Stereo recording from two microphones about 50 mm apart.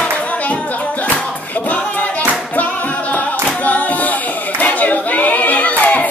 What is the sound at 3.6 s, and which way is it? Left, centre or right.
Singing, left.